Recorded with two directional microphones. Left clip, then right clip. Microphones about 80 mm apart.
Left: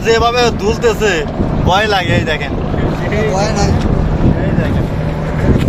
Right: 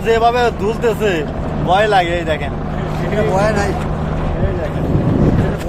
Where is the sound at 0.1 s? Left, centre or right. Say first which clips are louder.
Left 2 dB; right.